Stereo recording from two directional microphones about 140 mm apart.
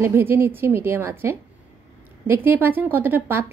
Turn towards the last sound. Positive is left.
turn(degrees=-15)  # may be behind; listen again after turning